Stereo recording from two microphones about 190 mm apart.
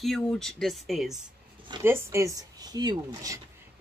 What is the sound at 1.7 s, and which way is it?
Speech, 15° right (ahead or behind).